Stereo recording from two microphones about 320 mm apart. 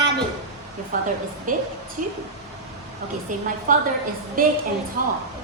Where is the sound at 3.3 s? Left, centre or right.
Right.